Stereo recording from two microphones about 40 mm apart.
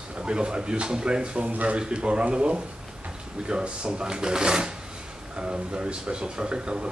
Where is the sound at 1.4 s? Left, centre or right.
Right.